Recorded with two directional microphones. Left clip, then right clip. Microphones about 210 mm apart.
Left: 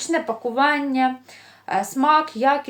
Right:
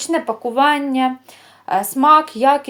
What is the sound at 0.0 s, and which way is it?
A woman's voice, 30° right (ahead or behind).